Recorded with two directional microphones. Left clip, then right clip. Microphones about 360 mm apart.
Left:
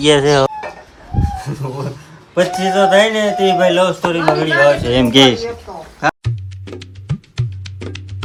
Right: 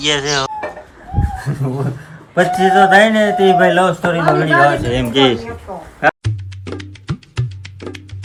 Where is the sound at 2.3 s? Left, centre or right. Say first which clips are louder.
Right 3 dB; centre.